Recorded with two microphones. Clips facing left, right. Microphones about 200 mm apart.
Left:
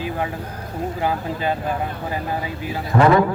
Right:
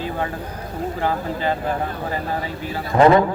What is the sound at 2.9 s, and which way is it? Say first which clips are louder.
Speech: right 2 dB; 25° right (ahead or behind).